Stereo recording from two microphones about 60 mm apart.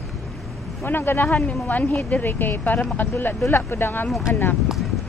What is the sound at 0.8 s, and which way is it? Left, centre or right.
Speech, left.